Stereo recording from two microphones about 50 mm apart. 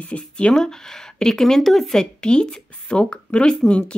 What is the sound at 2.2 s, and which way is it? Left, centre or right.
A woman's voice, centre.